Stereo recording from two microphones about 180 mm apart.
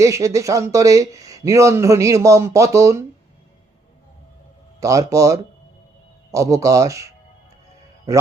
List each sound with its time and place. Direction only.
0.0 s speech: 15° right (ahead or behind)
4.8 s speech: 15° right (ahead or behind)